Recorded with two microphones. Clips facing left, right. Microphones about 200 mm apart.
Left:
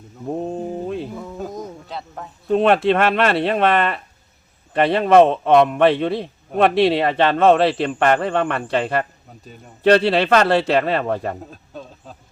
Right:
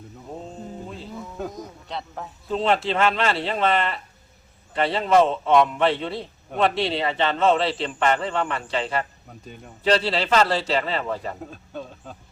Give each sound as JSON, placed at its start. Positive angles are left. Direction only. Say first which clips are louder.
{"t": 0.4, "sound": "music", "louder": "left 11 dB", "side_deg": 60}
{"t": 1.9, "sound": "a man's voice", "louder": "left 1 dB", "side_deg": 0}
{"t": 2.5, "sound": "speech", "louder": "left 7 dB", "side_deg": 60}
{"t": 11.5, "sound": "speech", "louder": "right 1 dB", "side_deg": 0}